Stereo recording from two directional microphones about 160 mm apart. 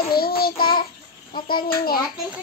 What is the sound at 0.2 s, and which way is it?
Child singing, 70° left (ahead or behind).